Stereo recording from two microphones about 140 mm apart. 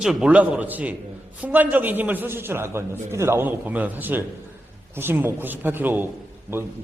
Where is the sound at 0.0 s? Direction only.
5° right (ahead or behind).